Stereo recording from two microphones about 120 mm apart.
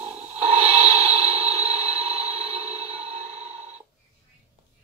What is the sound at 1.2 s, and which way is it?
Music, 50° right (ahead or behind).